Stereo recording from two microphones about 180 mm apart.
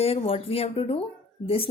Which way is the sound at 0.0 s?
35° left (ahead or behind).